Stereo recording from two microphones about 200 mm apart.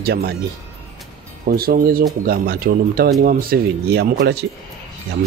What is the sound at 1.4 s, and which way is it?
Speech, 50° right (ahead or behind).